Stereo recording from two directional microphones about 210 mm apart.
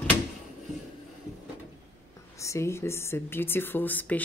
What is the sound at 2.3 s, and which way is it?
Speech, 15° left (ahead or behind).